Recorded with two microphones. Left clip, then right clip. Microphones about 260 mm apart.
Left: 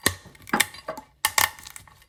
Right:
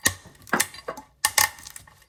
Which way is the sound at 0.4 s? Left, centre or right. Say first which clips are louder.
Left 1 dB; centre.